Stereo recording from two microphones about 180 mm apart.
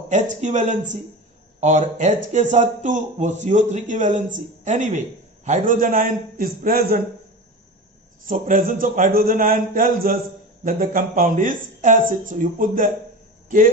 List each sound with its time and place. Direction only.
0.1 s speech: 45° right (ahead or behind)
8.3 s speech: 50° right (ahead or behind)